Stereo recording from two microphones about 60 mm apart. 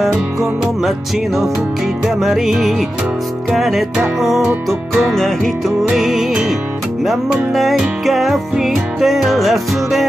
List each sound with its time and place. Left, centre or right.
0.0 s music: centre